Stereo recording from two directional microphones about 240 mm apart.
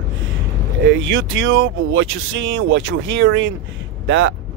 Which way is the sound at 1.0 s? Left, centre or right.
Right.